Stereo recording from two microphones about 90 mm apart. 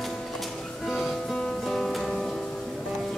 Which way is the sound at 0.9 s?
Centre (ahead or behind).